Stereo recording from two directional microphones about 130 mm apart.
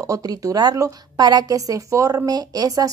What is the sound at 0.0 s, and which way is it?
A woman's voice, 25° right (ahead or behind).